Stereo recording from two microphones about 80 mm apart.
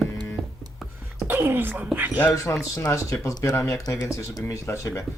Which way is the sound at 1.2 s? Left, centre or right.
Right.